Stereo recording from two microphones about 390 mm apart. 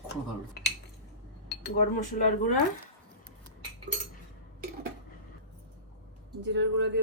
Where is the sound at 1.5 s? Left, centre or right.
Centre.